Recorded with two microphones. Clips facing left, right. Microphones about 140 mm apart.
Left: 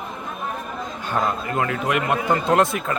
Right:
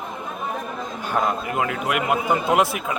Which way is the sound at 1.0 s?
15° right (ahead or behind).